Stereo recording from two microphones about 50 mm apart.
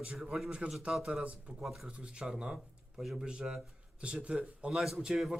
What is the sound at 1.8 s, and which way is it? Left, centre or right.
A man's voice, centre.